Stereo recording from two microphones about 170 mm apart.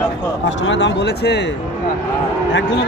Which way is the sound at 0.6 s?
90° left.